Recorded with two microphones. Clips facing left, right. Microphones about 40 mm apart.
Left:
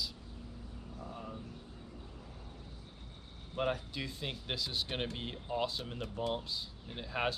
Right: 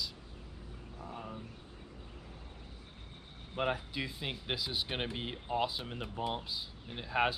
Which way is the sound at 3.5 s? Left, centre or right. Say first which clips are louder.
Right 1 dB; centre.